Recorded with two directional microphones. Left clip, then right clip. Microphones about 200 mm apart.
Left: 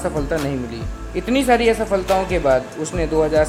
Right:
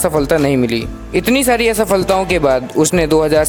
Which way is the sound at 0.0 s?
45° right (ahead or behind).